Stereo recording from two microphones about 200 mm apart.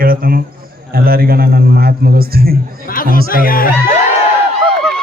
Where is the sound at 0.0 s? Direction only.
45° right (ahead or behind).